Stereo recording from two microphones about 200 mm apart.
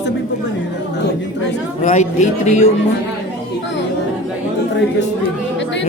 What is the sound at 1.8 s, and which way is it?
Speech, 35° left (ahead or behind).